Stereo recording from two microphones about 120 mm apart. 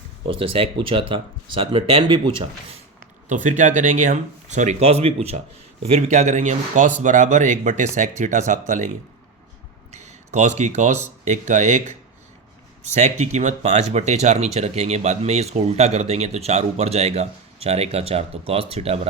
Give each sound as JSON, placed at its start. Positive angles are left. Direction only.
{"t": 0.3, "sound": "speech", "side_deg": -50}
{"t": 3.2, "sound": "speech", "side_deg": -90}
{"t": 9.9, "sound": "speech", "side_deg": -75}